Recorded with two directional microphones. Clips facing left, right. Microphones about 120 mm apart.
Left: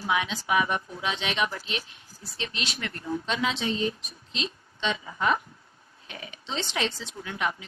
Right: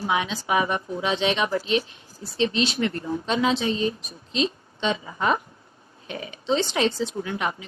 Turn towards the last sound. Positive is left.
turn(degrees=-30)  # may be behind; listen again after turning